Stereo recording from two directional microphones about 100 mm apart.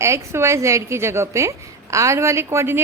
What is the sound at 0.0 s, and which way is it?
A woman's voice, 30° right (ahead or behind).